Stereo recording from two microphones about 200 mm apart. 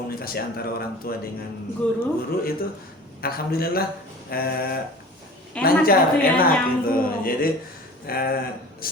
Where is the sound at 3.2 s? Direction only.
50° left (ahead or behind).